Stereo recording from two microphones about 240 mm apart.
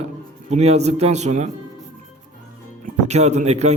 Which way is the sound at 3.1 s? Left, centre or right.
Right.